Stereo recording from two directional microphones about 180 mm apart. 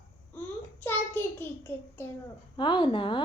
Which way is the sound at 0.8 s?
10° left (ahead or behind).